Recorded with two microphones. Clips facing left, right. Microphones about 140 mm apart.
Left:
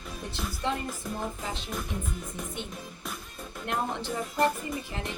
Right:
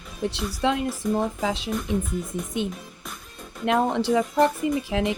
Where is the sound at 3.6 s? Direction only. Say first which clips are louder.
Right 10 dB; 85° right.